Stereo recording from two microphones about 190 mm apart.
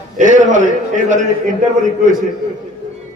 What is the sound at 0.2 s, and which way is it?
A man's voice, 40° right (ahead or behind).